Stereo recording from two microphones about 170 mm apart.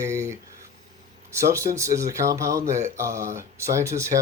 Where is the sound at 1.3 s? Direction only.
15° right (ahead or behind).